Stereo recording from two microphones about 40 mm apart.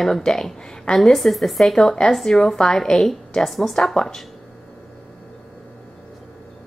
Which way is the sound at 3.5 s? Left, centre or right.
Centre.